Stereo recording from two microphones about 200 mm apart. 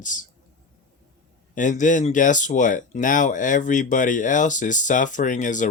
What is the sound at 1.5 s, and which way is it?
Speech, 40° left (ahead or behind).